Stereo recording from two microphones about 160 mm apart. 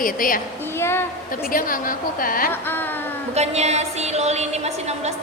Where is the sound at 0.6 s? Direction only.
15° left (ahead or behind).